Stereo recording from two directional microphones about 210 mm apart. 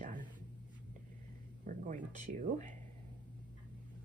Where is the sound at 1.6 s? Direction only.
35° right (ahead or behind).